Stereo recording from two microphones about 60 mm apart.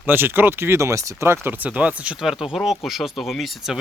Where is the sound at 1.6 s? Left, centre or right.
Right.